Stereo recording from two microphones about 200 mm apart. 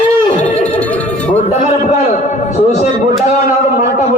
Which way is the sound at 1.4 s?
35° left (ahead or behind).